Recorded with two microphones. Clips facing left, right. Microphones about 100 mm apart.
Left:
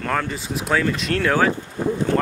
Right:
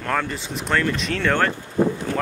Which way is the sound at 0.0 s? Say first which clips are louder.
Left 1 dB; centre (ahead or behind).